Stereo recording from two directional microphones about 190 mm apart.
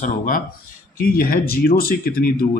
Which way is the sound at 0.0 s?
45° left (ahead or behind).